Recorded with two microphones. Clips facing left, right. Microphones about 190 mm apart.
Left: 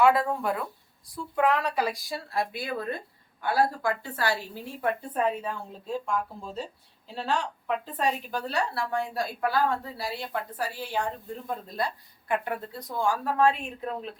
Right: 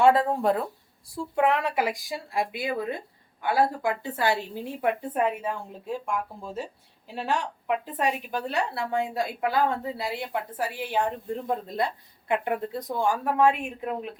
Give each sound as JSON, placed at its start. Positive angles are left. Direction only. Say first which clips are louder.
{"t": 0.0, "sound": "a woman's voice", "louder": "right 2 dB", "side_deg": -30}